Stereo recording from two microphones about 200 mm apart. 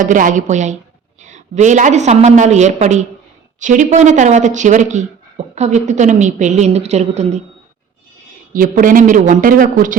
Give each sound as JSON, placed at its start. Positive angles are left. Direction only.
{"t": 0.0, "sound": "speech", "side_deg": -40}
{"t": 8.5, "sound": "speech", "side_deg": -45}